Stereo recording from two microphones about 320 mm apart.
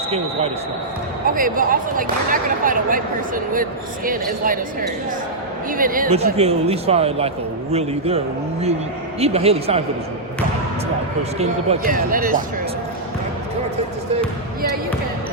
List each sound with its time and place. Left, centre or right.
1.3 s speech: right
5.7 s speech: right
9.2 s speech: centre
11.2 s speech: centre